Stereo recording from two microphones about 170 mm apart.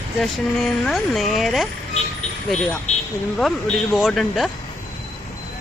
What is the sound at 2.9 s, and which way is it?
Vehicle, 40° left (ahead or behind).